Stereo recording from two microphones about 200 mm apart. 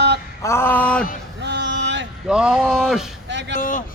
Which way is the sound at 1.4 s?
60° right (ahead or behind).